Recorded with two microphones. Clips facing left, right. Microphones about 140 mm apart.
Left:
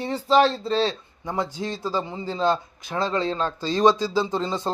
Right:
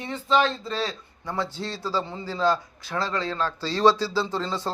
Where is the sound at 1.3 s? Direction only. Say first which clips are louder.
Left 2 dB; 15° left (ahead or behind).